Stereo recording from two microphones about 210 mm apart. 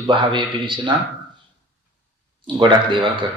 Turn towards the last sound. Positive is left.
turn(degrees=-25)  # may be behind; listen again after turning